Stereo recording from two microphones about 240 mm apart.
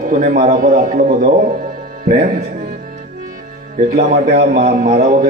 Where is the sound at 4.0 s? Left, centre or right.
Right.